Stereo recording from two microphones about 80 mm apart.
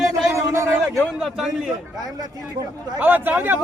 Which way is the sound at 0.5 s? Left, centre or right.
Right.